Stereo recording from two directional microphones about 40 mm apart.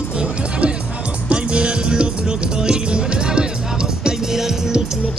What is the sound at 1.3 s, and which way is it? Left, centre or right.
Music, right.